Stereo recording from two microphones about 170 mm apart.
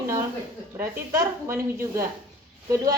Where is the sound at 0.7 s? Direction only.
15° right (ahead or behind).